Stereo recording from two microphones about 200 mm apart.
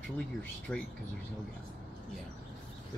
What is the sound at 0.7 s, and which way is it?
Speech, 10° left (ahead or behind).